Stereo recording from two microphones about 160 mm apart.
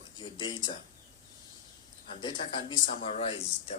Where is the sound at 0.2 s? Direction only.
30° left (ahead or behind).